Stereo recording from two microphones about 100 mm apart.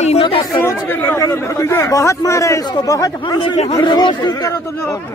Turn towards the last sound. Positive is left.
turn(degrees=50)  # may be behind; listen again after turning